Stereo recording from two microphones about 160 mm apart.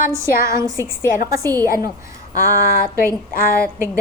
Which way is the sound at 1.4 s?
15° left (ahead or behind).